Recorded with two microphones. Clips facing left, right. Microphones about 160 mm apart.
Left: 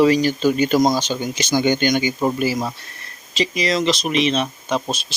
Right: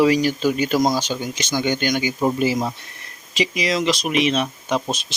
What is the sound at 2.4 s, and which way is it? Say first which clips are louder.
Speech: right 1 dB; 20° right (ahead or behind).